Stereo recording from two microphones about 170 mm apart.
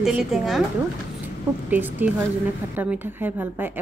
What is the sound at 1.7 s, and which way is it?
A woman's voice, 10° right (ahead or behind).